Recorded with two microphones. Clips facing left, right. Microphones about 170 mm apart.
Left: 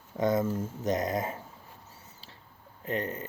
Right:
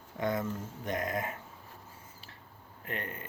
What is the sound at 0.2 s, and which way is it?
Speech, 35° left (ahead or behind).